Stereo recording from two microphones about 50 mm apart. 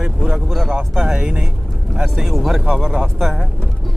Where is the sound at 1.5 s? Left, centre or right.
Centre.